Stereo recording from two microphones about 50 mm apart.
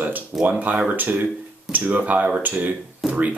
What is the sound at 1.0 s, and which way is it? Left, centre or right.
Speech, right.